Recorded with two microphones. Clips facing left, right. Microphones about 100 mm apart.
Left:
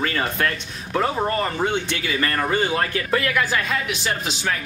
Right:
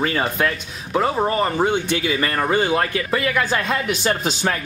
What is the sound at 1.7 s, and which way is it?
Speech, 20° right (ahead or behind).